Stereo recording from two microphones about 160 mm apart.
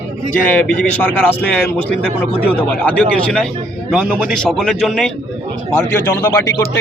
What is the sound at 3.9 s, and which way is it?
Speech, 10° right (ahead or behind).